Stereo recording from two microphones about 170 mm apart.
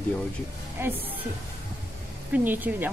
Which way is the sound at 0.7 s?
15° right (ahead or behind).